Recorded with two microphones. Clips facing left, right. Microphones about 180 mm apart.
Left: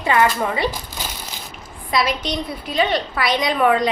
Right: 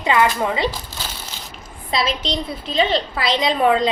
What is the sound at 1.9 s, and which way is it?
A woman's voice, 25° right (ahead or behind).